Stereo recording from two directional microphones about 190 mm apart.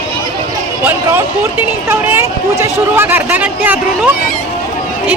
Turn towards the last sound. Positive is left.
turn(degrees=-10)  # may be behind; listen again after turning